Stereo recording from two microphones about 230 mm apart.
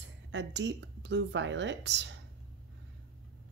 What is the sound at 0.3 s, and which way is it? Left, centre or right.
Speech, right.